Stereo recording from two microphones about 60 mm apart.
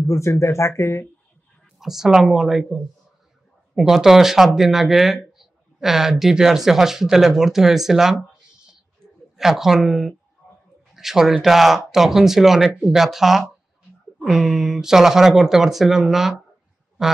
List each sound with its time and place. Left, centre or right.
0.0 s speech: left
1.8 s speech: centre
9.4 s speech: centre
17.0 s a sound: centre